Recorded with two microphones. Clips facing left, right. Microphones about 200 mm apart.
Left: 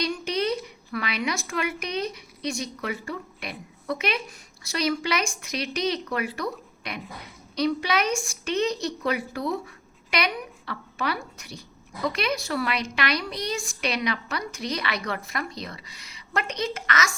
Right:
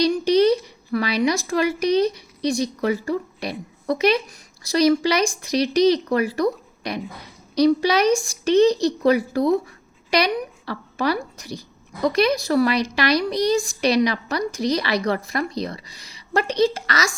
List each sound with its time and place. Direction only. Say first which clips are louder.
0.0 s a woman's voice: right 10 dB; 35° right (ahead or behind)